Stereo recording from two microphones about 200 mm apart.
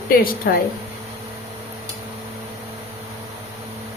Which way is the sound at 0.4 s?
50° left (ahead or behind).